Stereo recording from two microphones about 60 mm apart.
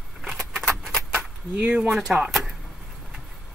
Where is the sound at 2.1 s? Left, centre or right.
Centre.